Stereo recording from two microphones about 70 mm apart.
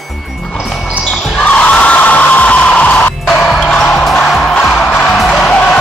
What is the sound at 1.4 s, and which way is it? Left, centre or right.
Music, centre.